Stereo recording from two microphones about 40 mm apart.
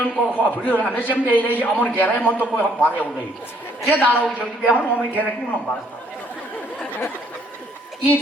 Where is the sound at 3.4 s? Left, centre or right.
Left.